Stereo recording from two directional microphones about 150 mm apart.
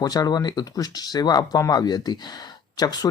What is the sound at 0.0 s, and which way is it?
Speech, 25° left (ahead or behind).